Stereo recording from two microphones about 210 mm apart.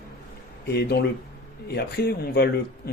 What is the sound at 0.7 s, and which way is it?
Speech, 50° left (ahead or behind).